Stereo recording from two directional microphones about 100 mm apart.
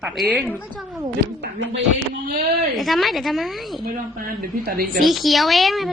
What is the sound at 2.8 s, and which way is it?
A woman's voice, centre (ahead or behind).